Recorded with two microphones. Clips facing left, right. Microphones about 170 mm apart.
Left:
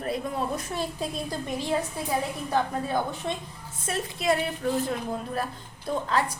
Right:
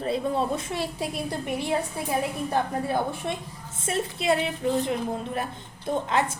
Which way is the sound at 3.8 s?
25° right (ahead or behind).